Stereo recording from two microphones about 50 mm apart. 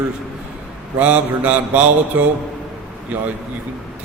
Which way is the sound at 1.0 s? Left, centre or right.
Right.